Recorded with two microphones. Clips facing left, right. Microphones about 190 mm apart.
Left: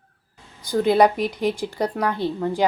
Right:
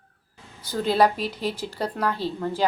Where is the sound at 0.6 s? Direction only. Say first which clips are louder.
Left 4 dB; 15° left (ahead or behind).